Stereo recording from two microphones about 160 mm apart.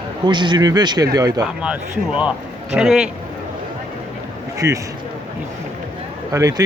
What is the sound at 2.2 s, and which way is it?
Speech, 5° right (ahead or behind).